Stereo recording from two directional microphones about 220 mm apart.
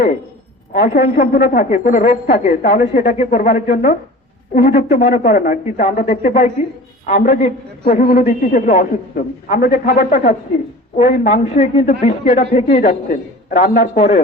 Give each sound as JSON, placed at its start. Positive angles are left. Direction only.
{"t": 0.7, "sound": "a man's voice", "side_deg": 40}